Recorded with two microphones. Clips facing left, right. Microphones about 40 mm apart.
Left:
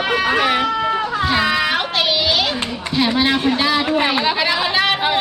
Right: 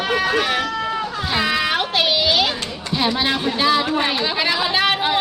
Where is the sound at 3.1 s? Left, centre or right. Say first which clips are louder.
Left 4 dB; centre.